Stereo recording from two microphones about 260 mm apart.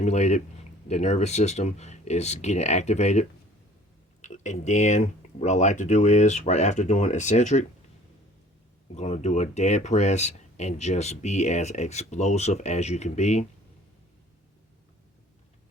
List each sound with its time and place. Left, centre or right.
0.0 s speech: left
9.0 s speech: left